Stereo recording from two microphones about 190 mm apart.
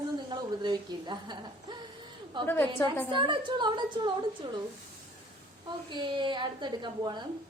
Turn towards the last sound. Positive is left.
turn(degrees=-25)  # may be behind; listen again after turning